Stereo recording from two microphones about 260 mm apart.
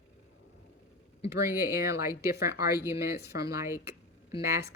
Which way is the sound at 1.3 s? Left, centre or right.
Centre.